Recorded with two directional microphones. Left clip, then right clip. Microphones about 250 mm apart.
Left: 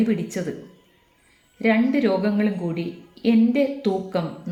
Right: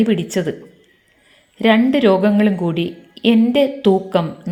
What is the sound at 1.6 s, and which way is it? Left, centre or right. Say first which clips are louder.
A woman's voice: right 7 dB; right.